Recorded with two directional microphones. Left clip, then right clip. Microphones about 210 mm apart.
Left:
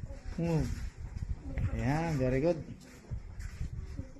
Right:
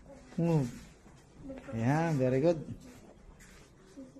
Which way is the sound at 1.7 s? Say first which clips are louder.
Right 3 dB; 15° right (ahead or behind).